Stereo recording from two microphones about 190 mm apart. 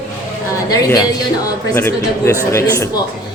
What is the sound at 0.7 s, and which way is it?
A man's voice, 15° left (ahead or behind).